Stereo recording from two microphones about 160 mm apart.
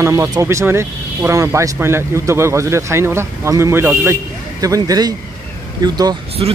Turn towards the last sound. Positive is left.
turn(degrees=-35)  # may be behind; listen again after turning